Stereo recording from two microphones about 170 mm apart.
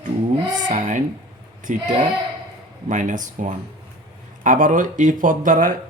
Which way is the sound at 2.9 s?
50° right (ahead or behind).